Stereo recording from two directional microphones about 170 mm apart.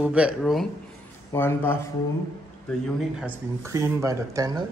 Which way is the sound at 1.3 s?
15° left (ahead or behind).